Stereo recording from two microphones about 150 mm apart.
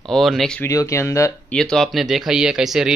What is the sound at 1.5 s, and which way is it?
Speech, 5° left (ahead or behind).